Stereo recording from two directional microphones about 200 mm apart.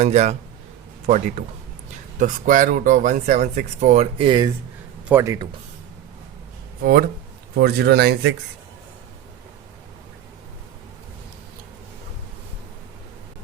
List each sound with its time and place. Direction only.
0.0 s speech: 35° right (ahead or behind); by 5.5 s 15° right (ahead or behind)
7.6 s speech: 55° right (ahead or behind)